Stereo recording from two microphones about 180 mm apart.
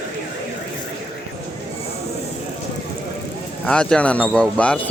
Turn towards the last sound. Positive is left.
turn(degrees=5)  # may be behind; listen again after turning